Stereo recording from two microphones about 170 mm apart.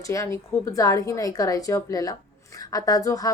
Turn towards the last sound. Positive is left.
turn(degrees=20)  # may be behind; listen again after turning